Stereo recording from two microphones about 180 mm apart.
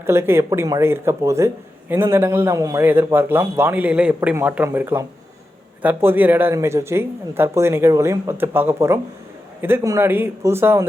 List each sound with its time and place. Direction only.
0.0 s a man's voice: 15° right (ahead or behind)